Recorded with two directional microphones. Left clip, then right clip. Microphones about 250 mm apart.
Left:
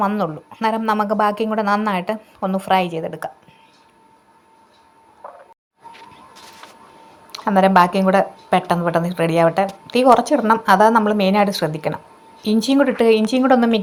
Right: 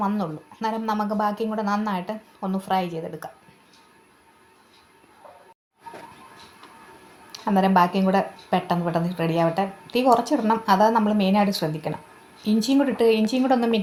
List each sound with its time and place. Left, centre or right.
0.0 s speech: left
7.3 s speech: centre